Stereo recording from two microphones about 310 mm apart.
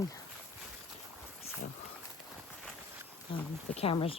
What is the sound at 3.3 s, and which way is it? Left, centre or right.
Speech, centre.